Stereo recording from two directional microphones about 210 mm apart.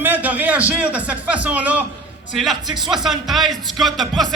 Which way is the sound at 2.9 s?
Centre (ahead or behind).